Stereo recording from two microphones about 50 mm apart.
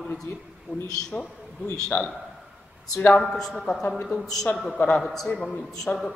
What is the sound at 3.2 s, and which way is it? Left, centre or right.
Speech, centre.